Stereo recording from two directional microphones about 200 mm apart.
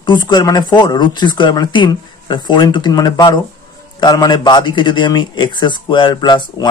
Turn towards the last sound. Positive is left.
turn(degrees=20)  # may be behind; listen again after turning